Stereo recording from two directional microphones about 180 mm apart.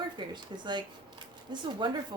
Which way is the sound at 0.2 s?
25° right (ahead or behind).